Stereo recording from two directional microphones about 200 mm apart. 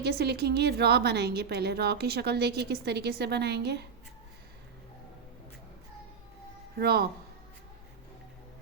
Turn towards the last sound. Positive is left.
turn(degrees=-50)  # may be behind; listen again after turning